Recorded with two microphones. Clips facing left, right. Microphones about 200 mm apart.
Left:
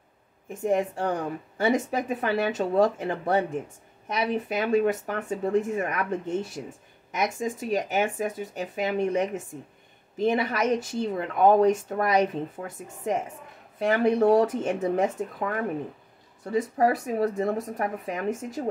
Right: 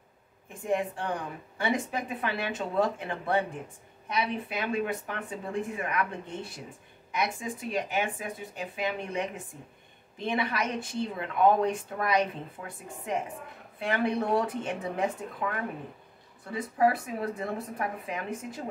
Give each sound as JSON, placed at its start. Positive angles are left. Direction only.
{"t": 0.7, "sound": "speech", "side_deg": 40}
{"t": 13.7, "sound": "speech", "side_deg": 40}